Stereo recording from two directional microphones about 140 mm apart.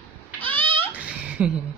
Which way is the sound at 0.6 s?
40° right (ahead or behind).